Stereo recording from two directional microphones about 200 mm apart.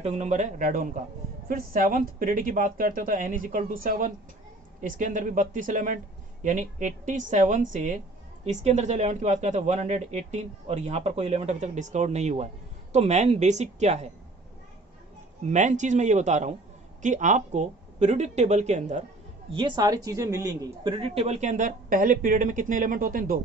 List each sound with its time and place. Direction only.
0.0 s a woman's voice: 35° right (ahead or behind)
15.4 s speech: 35° right (ahead or behind)
19.5 s speech: 20° right (ahead or behind); by 23.4 s 45° right (ahead or behind)